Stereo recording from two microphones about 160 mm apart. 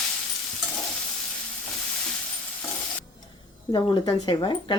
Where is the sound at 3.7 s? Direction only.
30° left (ahead or behind).